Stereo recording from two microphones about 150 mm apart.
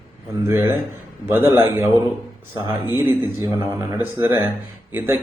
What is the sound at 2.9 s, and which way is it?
Speech, 15° right (ahead or behind).